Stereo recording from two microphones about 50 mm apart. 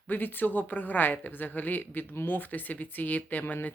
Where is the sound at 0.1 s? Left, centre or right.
Left.